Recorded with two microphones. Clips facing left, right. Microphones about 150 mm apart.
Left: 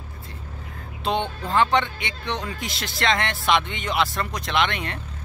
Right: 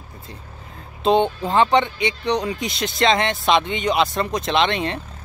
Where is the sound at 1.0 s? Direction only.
20° right (ahead or behind).